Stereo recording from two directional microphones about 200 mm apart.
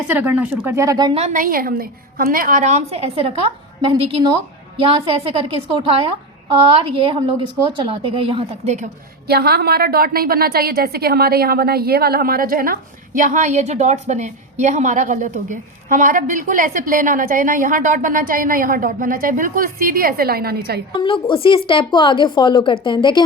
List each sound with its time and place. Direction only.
0.1 s speech: 10° right (ahead or behind)
1.2 s a woman's voice: 40° right (ahead or behind)
9.2 s a woman's voice: 50° right (ahead or behind)
21.0 s a woman's voice: 25° left (ahead or behind)